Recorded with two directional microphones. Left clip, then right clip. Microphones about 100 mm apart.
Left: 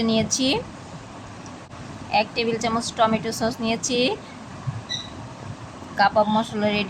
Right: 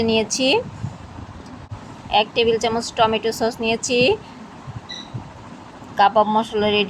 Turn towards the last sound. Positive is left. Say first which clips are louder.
# right 5 dB
turn(degrees=-40)  # may be behind; listen again after turning